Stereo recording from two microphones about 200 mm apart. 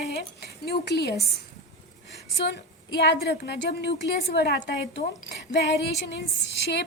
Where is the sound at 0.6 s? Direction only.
55° left (ahead or behind).